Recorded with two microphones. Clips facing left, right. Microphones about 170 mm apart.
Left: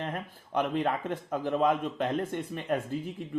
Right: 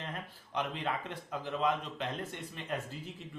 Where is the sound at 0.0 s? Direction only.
50° left (ahead or behind).